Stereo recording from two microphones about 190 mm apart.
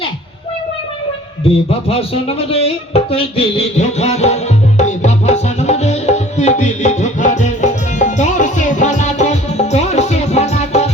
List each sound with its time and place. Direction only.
1.5 s a man's voice: 30° left (ahead or behind)
4.8 s music: 40° left (ahead or behind)